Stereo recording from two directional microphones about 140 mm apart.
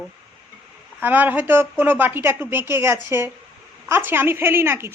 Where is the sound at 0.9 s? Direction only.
10° right (ahead or behind).